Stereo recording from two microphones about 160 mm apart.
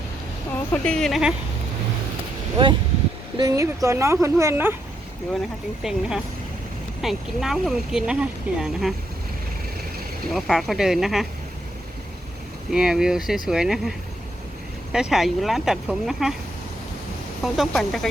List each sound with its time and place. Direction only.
0.7 s speech: 5° left (ahead or behind)
3.3 s a child's voice: 20° right (ahead or behind)
5.8 s speech: 5° right (ahead or behind)
10.3 s speech: centre (ahead or behind)
12.7 s speech: 5° right (ahead or behind)
14.9 s speech: centre (ahead or behind)
17.4 s speech: centre (ahead or behind)